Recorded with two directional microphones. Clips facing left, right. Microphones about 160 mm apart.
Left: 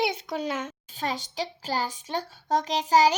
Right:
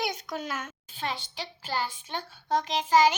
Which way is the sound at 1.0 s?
40° left (ahead or behind).